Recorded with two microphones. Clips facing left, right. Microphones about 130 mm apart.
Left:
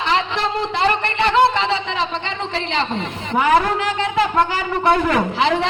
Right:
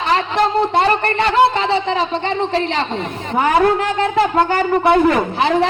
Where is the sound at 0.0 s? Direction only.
45° right (ahead or behind).